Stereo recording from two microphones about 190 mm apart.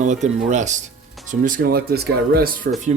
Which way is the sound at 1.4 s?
55° right (ahead or behind).